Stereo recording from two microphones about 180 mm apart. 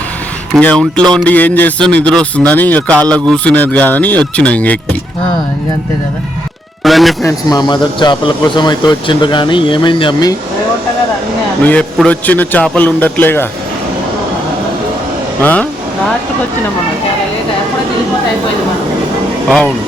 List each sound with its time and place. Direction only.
0.5 s speech: 5° left (ahead or behind)
6.8 s speech: centre (ahead or behind)
7.2 s speech: 20° left (ahead or behind)
11.6 s speech: 5° left (ahead or behind)
15.4 s speech: 10° left (ahead or behind)
19.5 s speech: centre (ahead or behind)